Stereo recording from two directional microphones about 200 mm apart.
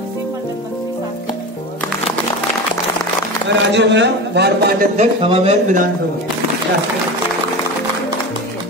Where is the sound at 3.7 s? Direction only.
60° right (ahead or behind).